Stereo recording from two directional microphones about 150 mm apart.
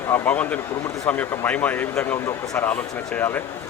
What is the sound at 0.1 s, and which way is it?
Speech, 10° left (ahead or behind).